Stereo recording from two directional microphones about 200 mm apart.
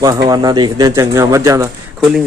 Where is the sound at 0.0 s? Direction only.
20° right (ahead or behind).